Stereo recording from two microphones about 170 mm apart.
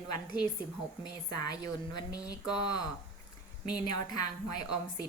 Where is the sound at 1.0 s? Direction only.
25° left (ahead or behind).